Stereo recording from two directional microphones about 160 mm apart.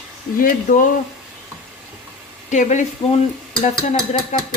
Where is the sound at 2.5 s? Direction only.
50° left (ahead or behind).